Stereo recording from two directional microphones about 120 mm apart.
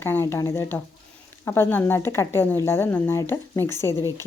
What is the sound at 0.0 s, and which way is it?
A woman's voice, 20° left (ahead or behind).